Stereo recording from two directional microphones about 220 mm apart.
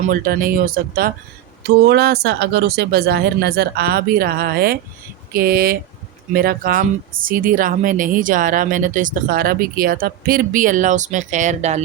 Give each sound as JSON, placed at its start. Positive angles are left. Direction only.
{"t": 0.1, "sound": "speech", "side_deg": -40}